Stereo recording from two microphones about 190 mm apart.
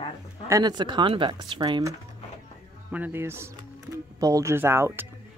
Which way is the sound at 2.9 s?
10° right (ahead or behind).